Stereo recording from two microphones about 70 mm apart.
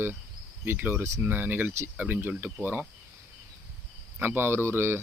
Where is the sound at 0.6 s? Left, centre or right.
Right.